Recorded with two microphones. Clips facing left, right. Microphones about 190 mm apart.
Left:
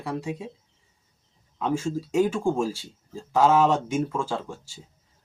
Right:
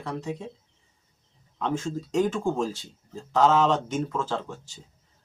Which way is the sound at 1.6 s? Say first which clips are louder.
Left 2 dB; 10° left (ahead or behind).